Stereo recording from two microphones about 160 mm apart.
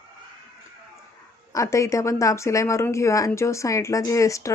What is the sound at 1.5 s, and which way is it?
Speech, 20° left (ahead or behind).